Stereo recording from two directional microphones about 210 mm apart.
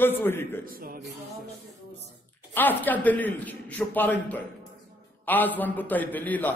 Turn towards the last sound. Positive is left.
turn(degrees=10)  # may be behind; listen again after turning